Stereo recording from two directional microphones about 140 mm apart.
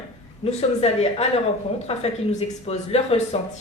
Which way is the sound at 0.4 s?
50° left (ahead or behind).